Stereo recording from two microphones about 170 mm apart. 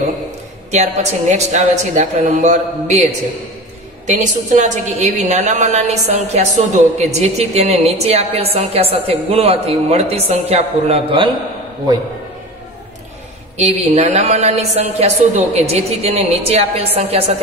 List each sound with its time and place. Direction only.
0.7 s a woman's voice: 40° right (ahead or behind)
4.2 s a woman's voice: 45° right (ahead or behind)
13.6 s a woman's voice: 40° right (ahead or behind)